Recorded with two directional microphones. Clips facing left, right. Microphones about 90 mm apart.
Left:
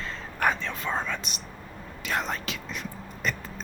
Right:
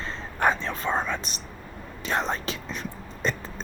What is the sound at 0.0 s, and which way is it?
Whispering, 30° right (ahead or behind).